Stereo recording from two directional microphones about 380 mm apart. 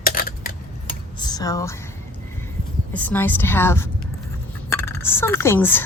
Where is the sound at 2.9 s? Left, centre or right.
Centre.